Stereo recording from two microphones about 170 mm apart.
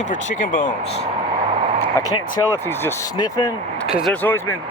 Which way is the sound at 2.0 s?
20° left (ahead or behind).